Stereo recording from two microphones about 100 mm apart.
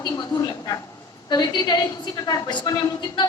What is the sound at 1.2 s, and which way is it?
A woman's voice, 45° left (ahead or behind).